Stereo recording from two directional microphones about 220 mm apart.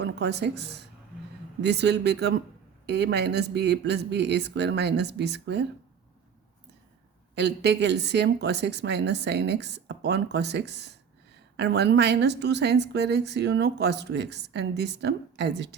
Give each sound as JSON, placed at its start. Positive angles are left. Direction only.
{"t": 0.0, "sound": "a woman's voice", "side_deg": -50}
{"t": 7.3, "sound": "a woman's voice", "side_deg": -50}